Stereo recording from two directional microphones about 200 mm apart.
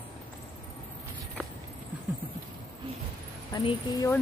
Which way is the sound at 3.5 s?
20° left (ahead or behind).